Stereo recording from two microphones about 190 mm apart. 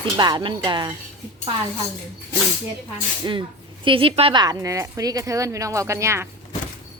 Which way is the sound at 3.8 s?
30° right (ahead or behind).